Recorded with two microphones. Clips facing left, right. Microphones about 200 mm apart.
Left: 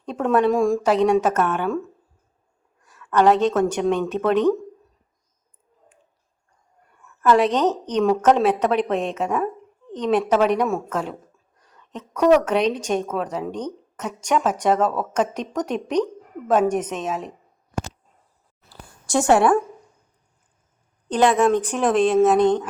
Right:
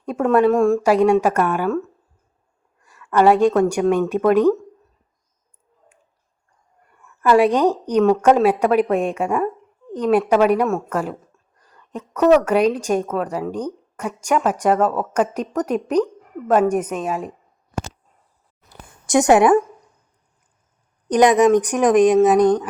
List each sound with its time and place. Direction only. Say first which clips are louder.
0.0 s a woman's voice: right 3 dB; 5° right (ahead or behind)
3.1 s a woman's voice: right 3 dB; 10° right (ahead or behind)
7.2 s a woman's voice: right 3 dB; 10° right (ahead or behind)
18.7 s a sound: right 5 dB; 20° right (ahead or behind)
21.1 s a woman's voice: right 4 dB; 15° right (ahead or behind)
22.4 s speech: right 3 dB; 25° left (ahead or behind)